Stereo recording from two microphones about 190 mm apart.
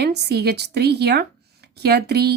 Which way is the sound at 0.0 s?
60° right (ahead or behind).